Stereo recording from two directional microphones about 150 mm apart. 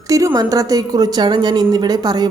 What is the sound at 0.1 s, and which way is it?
A woman's voice, 20° right (ahead or behind).